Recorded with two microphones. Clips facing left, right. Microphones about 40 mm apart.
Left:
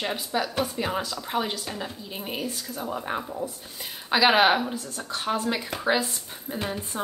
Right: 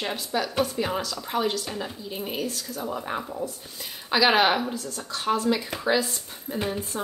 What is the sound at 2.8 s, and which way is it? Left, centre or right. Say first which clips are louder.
Speech: even; centre.